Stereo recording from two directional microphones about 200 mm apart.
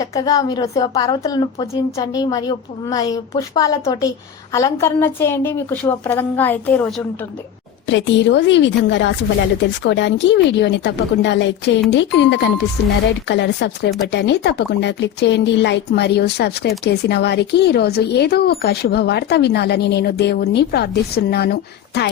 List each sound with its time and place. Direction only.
0.0 s a woman's voice: 20° left (ahead or behind)
7.9 s speech: 65° left (ahead or behind)